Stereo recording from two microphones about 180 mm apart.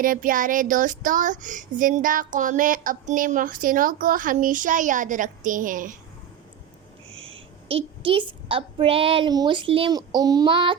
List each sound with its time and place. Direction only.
0.0 s child singing: 50° right (ahead or behind)
7.1 s a sound: 90° right
7.7 s a woman's voice: 30° right (ahead or behind)